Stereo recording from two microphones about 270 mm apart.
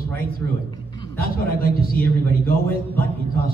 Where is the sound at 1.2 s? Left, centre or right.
Left.